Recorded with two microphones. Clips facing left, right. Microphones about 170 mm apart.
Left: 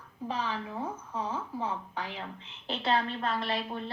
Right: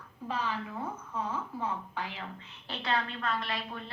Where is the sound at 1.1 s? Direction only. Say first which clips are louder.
Even; 30° left (ahead or behind).